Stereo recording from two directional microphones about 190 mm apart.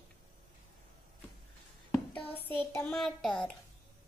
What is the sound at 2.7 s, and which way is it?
Speech, 5° left (ahead or behind).